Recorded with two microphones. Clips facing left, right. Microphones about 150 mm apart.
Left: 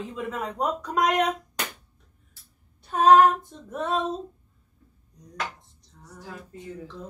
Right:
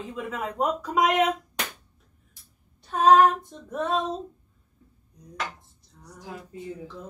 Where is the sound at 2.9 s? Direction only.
Centre (ahead or behind).